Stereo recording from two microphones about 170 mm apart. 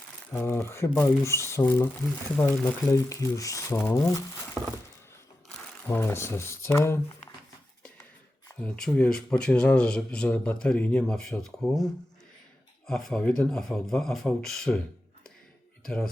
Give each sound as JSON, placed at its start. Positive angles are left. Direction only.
{"t": 0.3, "sound": "speech", "side_deg": 15}
{"t": 5.9, "sound": "speech", "side_deg": 15}
{"t": 8.4, "sound": "speech", "side_deg": 5}
{"t": 12.9, "sound": "speech", "side_deg": 0}
{"t": 15.8, "sound": "speech", "side_deg": 5}